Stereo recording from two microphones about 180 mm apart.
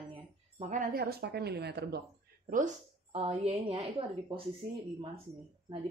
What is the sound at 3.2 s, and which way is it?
A woman's voice, 30° right (ahead or behind).